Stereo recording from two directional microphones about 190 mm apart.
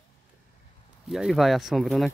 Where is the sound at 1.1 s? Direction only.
Centre (ahead or behind).